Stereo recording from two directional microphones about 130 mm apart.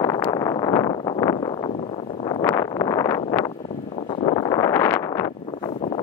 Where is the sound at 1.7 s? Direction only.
50° left (ahead or behind).